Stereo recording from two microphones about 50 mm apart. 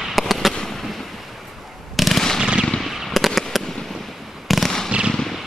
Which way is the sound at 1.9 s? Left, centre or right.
Centre.